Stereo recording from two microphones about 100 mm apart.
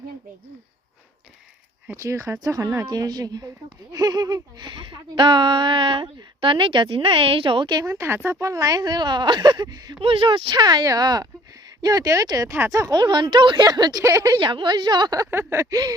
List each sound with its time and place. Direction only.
1.9 s speech: 30° right (ahead or behind); by 7.7 s 60° right (ahead or behind)
7.7 s speech: 40° right (ahead or behind)
7.9 s speech: 25° right (ahead or behind); by 10.0 s 40° right (ahead or behind)
10.0 s speech: 65° right (ahead or behind); by 14.0 s 45° right (ahead or behind)
14.0 s speech: 30° right (ahead or behind)
14.3 s speech: 50° right (ahead or behind)
15.3 s a sound: 25° right (ahead or behind)
15.7 s speech: 40° right (ahead or behind)